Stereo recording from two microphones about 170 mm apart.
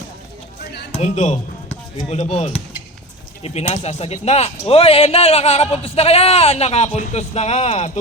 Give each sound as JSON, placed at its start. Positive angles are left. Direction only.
{"t": 0.9, "sound": "a man's voice", "side_deg": 40}
{"t": 3.4, "sound": "a man's voice", "side_deg": 40}